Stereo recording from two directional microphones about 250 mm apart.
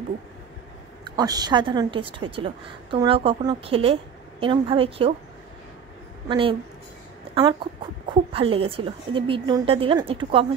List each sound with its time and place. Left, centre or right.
1.0 s a woman's voice: centre
6.2 s a woman's voice: centre
8.1 s a woman's voice: right